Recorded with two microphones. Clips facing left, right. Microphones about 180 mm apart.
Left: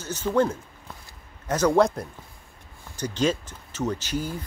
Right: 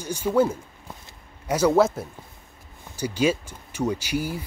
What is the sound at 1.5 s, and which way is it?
Speech, 5° right (ahead or behind).